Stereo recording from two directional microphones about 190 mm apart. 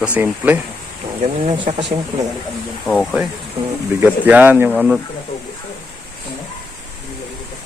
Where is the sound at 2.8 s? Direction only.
Centre (ahead or behind).